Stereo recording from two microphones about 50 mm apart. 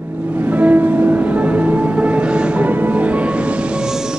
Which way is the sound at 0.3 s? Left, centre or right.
Right.